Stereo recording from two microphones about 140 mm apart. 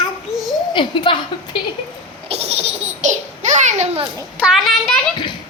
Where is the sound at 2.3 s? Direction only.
45° right (ahead or behind).